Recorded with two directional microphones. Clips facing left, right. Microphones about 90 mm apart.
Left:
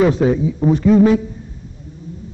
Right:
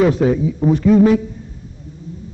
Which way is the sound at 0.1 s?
25° left (ahead or behind).